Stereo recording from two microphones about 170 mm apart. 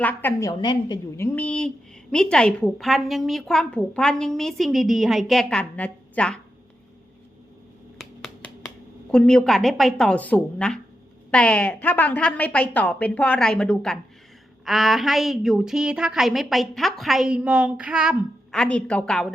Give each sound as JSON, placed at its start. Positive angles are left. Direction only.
{"t": 0.0, "sound": "a woman's voice", "side_deg": 10}
{"t": 1.1, "sound": "a woman's voice", "side_deg": 10}
{"t": 7.9, "sound": "finger snapping", "side_deg": 5}
{"t": 9.0, "sound": "a woman's voice", "side_deg": 5}
{"t": 18.5, "sound": "a woman's voice", "side_deg": 5}